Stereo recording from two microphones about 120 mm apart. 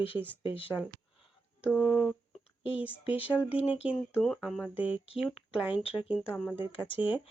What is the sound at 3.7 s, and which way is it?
Speech, 10° right (ahead or behind).